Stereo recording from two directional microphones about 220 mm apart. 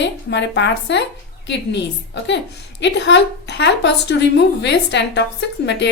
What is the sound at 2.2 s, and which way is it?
A woman's voice, 55° left (ahead or behind).